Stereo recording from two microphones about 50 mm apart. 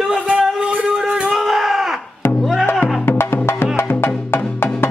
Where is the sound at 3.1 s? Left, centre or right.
Left.